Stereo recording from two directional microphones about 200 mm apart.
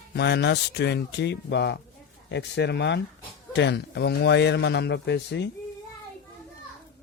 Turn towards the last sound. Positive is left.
turn(degrees=60)  # may be behind; listen again after turning